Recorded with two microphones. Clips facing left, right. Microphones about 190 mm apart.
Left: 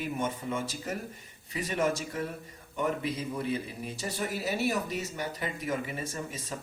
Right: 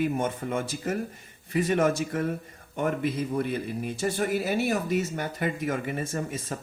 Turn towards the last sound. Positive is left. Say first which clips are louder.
# right 6 dB
turn(degrees=-55)  # may be behind; listen again after turning